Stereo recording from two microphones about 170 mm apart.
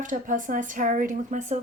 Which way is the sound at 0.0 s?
50° right (ahead or behind).